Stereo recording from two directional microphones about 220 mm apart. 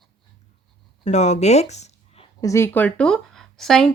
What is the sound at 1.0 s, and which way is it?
Speech, 30° left (ahead or behind).